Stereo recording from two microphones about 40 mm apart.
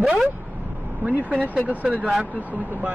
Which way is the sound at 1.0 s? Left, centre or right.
Right.